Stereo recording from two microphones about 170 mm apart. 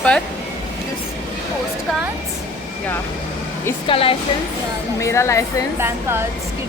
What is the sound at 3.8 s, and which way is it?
Speech, 30° left (ahead or behind).